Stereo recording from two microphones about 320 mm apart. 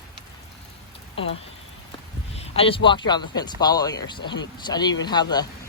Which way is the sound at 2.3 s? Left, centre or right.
Centre.